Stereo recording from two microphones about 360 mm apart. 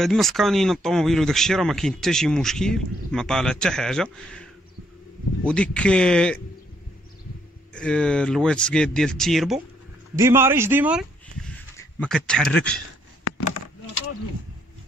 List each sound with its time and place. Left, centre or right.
0.0 s speech: centre
7.7 s a man's voice: centre
13.2 s a sound: left